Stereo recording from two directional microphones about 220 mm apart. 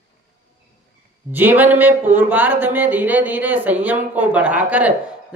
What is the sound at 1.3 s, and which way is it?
Speech, 10° right (ahead or behind).